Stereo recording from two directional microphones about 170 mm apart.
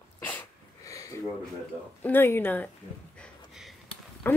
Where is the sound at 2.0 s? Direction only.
10° left (ahead or behind).